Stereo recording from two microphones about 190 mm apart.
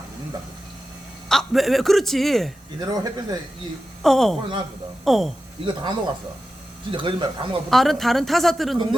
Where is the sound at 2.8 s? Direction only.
20° right (ahead or behind).